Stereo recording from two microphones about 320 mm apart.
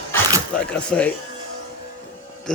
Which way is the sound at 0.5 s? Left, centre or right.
Centre.